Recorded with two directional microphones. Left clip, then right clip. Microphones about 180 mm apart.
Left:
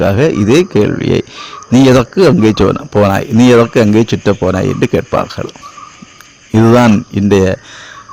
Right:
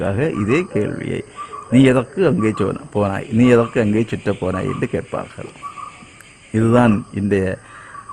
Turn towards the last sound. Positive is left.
turn(degrees=25)  # may be behind; listen again after turning